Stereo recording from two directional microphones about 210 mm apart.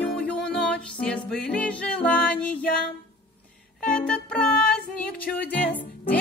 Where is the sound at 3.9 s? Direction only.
5° left (ahead or behind).